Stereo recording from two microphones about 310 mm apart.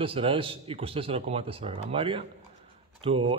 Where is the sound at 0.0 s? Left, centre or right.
Centre.